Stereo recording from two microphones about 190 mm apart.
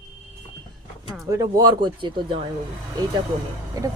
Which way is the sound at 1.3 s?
20° right (ahead or behind).